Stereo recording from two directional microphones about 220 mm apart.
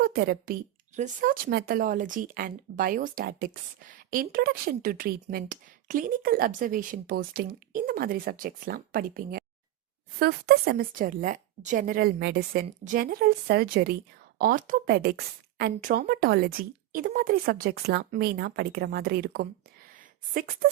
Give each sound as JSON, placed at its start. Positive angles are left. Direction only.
{"t": 0.0, "sound": "a woman's voice", "side_deg": -45}